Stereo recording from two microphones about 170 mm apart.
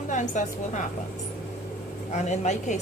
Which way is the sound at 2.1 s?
45° left (ahead or behind).